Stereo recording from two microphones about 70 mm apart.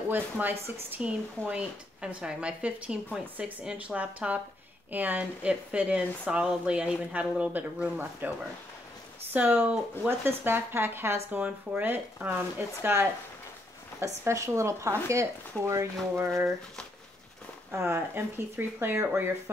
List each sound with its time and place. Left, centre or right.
0.1 s speech: right
9.3 s speech: right
17.6 s speech: right